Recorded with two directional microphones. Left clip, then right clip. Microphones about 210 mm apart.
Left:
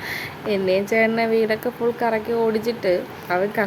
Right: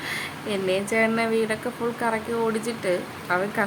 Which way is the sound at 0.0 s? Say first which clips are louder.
Left 2 dB; 10° left (ahead or behind).